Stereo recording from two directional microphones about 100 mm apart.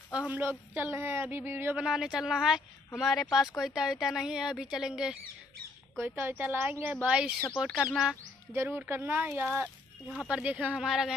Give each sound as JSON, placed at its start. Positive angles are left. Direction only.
{"t": 0.3, "sound": "speech", "side_deg": -20}
{"t": 1.8, "sound": "a woman's voice", "side_deg": -5}
{"t": 5.9, "sound": "speech", "side_deg": -20}
{"t": 7.1, "sound": "a woman's voice", "side_deg": -10}
{"t": 8.6, "sound": "speech", "side_deg": -20}
{"t": 10.1, "sound": "a woman's voice", "side_deg": -10}